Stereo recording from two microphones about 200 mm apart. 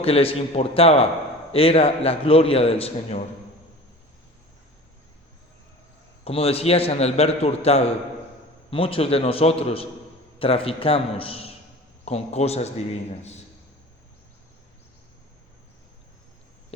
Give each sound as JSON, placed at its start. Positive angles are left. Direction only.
{"t": 0.0, "sound": "a man's voice", "side_deg": 30}
{"t": 6.2, "sound": "a man's voice", "side_deg": 30}